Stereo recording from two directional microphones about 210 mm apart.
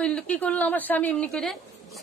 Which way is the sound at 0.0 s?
5° left (ahead or behind).